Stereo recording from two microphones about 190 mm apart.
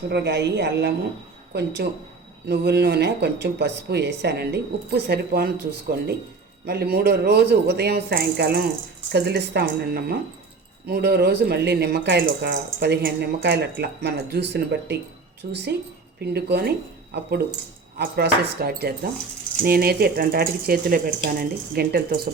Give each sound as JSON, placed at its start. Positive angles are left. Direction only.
{"t": 0.1, "sound": "speech", "side_deg": -65}
{"t": 16.2, "sound": "speech", "side_deg": -60}